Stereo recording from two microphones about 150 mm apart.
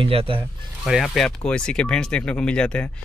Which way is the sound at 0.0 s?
40° right (ahead or behind).